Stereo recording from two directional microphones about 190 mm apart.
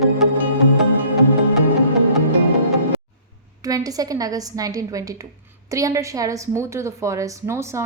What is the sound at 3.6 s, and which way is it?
A woman's voice, 20° right (ahead or behind).